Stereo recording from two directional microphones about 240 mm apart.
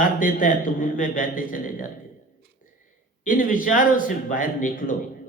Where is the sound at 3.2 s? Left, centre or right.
Left.